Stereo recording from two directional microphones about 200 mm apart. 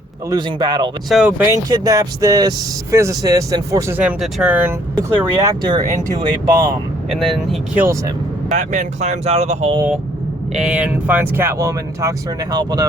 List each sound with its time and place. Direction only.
0.3 s speech: 20° right (ahead or behind)
1.1 s speech: 5° right (ahead or behind)
1.7 s speech: 20° right (ahead or behind)
4.9 s speech: 20° right (ahead or behind)
7.1 s speech: centre (ahead or behind)
8.4 s speech: 40° right (ahead or behind)
10.5 s speech: 5° right (ahead or behind); by 12.9 s 20° right (ahead or behind)